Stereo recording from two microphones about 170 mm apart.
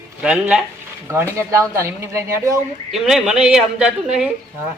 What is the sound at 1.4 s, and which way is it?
Speech, 15° right (ahead or behind).